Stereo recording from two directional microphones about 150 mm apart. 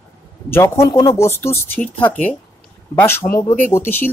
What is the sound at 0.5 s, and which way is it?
A woman's voice, 20° left (ahead or behind).